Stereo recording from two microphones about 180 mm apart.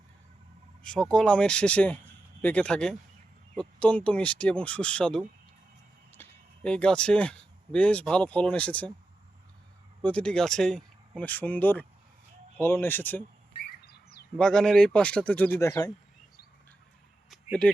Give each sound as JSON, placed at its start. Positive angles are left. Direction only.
{"t": 0.8, "sound": "speech", "side_deg": 5}
{"t": 10.0, "sound": "speech", "side_deg": 5}
{"t": 13.8, "sound": "bird", "side_deg": 60}
{"t": 14.3, "sound": "speech", "side_deg": 5}
{"t": 17.2, "sound": "a sound", "side_deg": 5}